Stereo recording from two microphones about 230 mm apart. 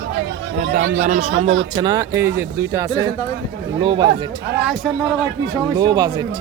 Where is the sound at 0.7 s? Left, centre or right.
Right.